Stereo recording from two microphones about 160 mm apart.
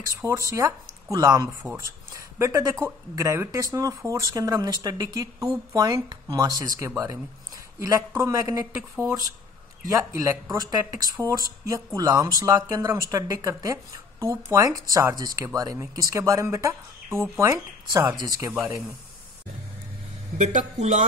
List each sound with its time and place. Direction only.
0.0 s speech: 20° right (ahead or behind)
20.3 s speech: 50° right (ahead or behind)